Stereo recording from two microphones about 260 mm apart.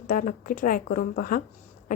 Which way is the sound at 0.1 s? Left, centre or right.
Left.